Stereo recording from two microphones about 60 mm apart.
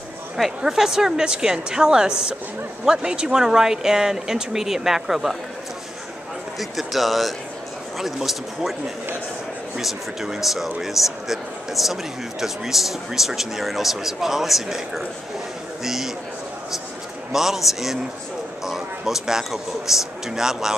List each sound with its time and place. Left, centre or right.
0.6 s speech: centre
6.6 s a man's voice: centre
9.8 s a man's voice: centre
17.3 s a man's voice: centre